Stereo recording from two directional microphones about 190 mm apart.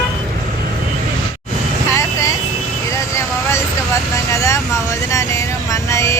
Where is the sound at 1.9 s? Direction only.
15° left (ahead or behind).